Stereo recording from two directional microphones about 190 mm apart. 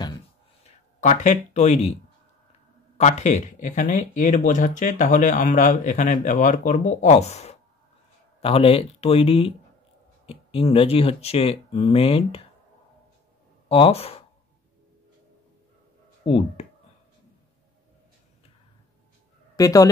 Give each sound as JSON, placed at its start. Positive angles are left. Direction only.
{"t": 1.0, "sound": "speech", "side_deg": 40}
{"t": 3.0, "sound": "speech", "side_deg": 35}
{"t": 13.7, "sound": "speech", "side_deg": 30}
{"t": 16.3, "sound": "speech", "side_deg": 30}
{"t": 19.5, "sound": "speech", "side_deg": 20}